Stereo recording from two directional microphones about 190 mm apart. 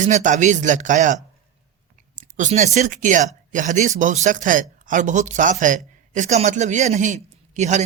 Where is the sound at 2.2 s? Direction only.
40° right (ahead or behind).